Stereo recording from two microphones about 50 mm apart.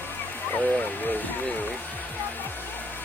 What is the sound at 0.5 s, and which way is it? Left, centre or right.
Speech, left.